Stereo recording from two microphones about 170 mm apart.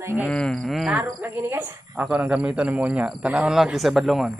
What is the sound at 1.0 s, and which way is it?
Speech, 15° right (ahead or behind).